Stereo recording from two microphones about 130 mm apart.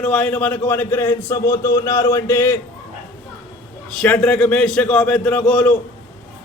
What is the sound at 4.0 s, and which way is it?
A man's voice, 10° left (ahead or behind).